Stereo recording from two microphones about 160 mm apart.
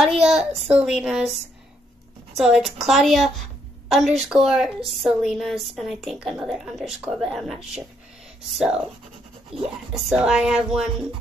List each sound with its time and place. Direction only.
0.0 s a woman's voice: 5° right (ahead or behind)
2.3 s a woman's voice: centre (ahead or behind)
9.5 s speech: 35° right (ahead or behind)
9.9 s a woman's voice: centre (ahead or behind)